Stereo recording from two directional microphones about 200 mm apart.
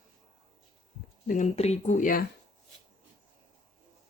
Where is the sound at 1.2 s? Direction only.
40° left (ahead or behind).